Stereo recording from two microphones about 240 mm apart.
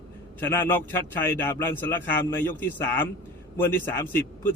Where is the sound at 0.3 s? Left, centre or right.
Centre.